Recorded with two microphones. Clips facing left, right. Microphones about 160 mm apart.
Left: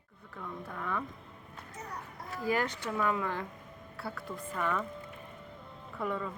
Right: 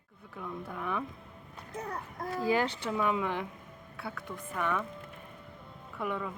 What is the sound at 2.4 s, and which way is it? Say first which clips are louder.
A woman's voice: right 2 dB; 25° right (ahead or behind).